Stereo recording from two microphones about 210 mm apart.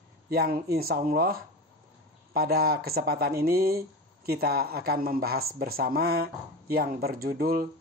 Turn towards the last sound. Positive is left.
turn(degrees=-45)  # may be behind; listen again after turning